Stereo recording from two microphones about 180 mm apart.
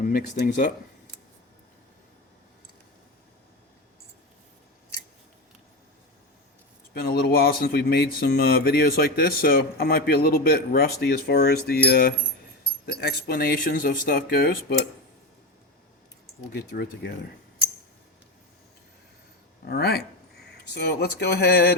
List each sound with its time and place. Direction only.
0.0 s speech: 50° left (ahead or behind)
6.9 s speech: 60° left (ahead or behind)
19.6 s speech: 60° left (ahead or behind)